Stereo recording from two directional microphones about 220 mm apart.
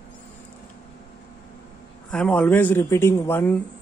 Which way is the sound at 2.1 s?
5° left (ahead or behind).